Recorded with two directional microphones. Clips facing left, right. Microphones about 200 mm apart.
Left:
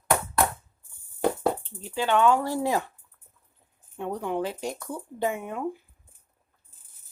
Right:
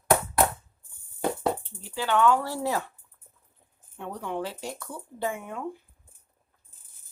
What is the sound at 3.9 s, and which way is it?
Speech, 15° left (ahead or behind).